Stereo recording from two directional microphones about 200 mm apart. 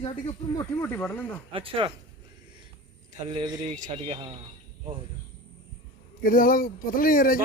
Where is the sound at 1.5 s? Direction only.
25° right (ahead or behind).